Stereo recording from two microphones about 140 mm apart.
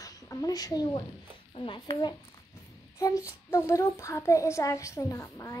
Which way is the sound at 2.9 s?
25° left (ahead or behind).